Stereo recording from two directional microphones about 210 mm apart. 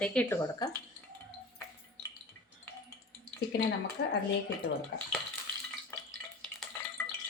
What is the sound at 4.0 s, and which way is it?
Speech, 55° left (ahead or behind).